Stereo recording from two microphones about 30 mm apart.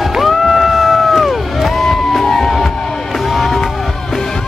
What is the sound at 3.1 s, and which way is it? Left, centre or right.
Music, centre.